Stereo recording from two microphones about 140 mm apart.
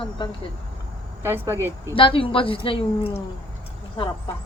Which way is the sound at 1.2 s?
15° right (ahead or behind).